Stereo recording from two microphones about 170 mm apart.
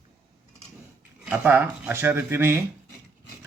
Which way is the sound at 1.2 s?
10° right (ahead or behind).